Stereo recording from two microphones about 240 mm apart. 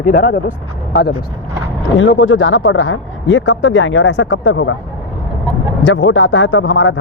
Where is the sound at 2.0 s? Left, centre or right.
Left.